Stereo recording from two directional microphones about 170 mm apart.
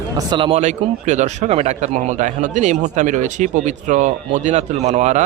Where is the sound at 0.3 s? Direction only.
30° right (ahead or behind).